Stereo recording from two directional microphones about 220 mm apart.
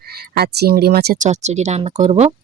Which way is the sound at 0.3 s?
45° right (ahead or behind).